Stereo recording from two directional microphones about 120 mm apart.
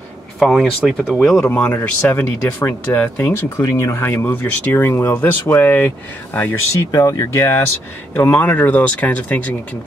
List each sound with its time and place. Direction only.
0.4 s speech: 5° left (ahead or behind)
1.4 s speech: 15° left (ahead or behind)